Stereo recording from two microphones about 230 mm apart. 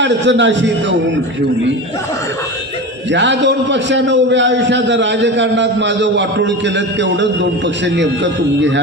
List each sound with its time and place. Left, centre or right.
0.0 s a man's voice: right
3.1 s a man's voice: right